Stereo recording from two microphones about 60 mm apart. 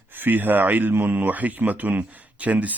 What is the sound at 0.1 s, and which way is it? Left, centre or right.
A man's voice, right.